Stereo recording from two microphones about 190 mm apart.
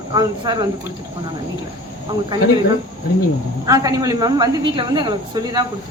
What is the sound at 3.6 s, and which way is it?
A woman's voice, 20° right (ahead or behind).